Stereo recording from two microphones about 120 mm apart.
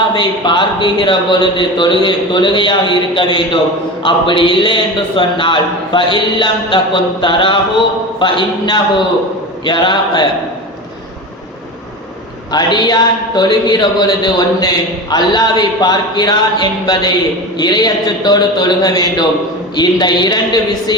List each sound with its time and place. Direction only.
0.1 s a man's voice: 40° left (ahead or behind)
12.5 s speech: 35° left (ahead or behind)